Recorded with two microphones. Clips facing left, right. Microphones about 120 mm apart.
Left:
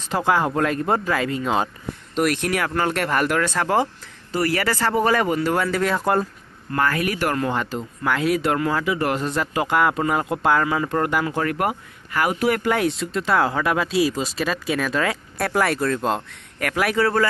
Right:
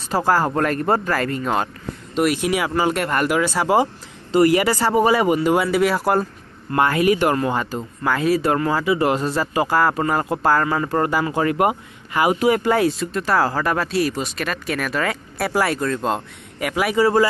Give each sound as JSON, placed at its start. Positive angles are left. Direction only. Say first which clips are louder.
{"t": 0.1, "sound": "speech", "louder": "right 2 dB", "side_deg": -5}
{"t": 6.7, "sound": "speech", "louder": "right 5 dB", "side_deg": -20}